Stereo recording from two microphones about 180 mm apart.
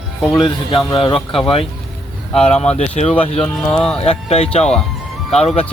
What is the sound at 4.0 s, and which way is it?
Speech, 35° left (ahead or behind).